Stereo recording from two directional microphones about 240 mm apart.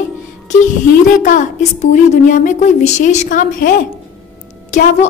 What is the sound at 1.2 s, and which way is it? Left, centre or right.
A woman's voice, left.